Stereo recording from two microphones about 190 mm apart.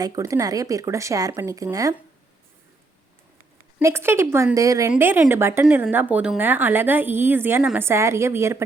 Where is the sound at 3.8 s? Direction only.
15° right (ahead or behind).